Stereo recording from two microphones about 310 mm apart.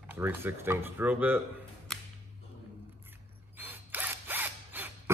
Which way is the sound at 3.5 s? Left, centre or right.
Centre.